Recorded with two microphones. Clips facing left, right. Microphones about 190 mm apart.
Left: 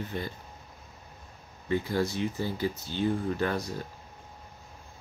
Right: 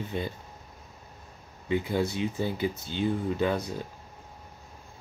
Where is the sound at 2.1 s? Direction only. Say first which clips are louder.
Right 1 dB; 15° right (ahead or behind).